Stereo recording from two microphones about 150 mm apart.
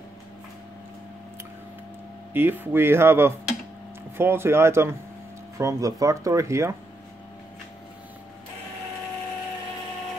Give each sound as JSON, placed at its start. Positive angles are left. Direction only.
{"t": 2.3, "sound": "speech", "side_deg": -15}